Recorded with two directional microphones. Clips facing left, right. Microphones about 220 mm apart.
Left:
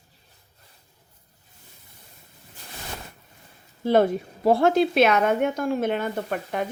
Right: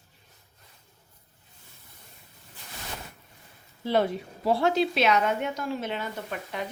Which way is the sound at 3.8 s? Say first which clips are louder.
Left 6 dB; 50° left (ahead or behind).